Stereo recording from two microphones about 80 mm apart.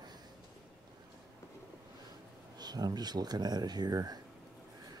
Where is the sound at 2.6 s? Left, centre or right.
Right.